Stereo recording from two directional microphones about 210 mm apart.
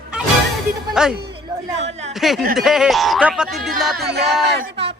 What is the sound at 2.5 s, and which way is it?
Speech, centre (ahead or behind).